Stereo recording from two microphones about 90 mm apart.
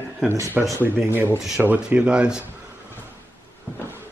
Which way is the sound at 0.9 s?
25° right (ahead or behind).